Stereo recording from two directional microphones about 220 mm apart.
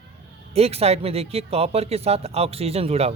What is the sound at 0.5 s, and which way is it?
Speech, 30° right (ahead or behind).